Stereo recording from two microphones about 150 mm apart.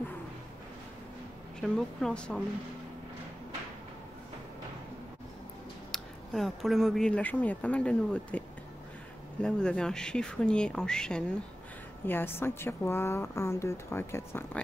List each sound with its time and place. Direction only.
1.6 s speech: centre (ahead or behind)
5.9 s speech: centre (ahead or behind)